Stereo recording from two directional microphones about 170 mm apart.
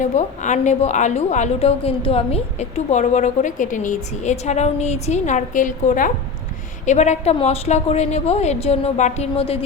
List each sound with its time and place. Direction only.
0.0 s a woman's voice: 45° left (ahead or behind)